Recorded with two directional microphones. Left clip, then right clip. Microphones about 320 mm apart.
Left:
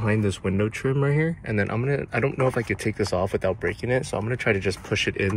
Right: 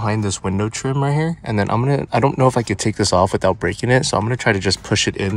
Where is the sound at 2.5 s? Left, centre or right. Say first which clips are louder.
Right 6 dB; centre.